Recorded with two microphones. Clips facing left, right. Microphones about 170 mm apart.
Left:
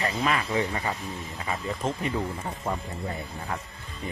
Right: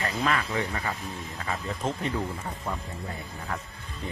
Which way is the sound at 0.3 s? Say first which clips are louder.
Left 2 dB; 15° left (ahead or behind).